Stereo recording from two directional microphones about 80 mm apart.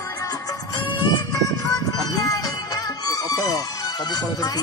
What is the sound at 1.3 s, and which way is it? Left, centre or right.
Music, left.